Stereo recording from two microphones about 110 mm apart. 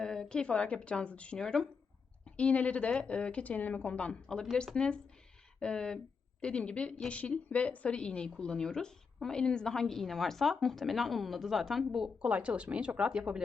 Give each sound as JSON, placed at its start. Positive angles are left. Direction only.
{"t": 0.0, "sound": "a woman's voice", "side_deg": 5}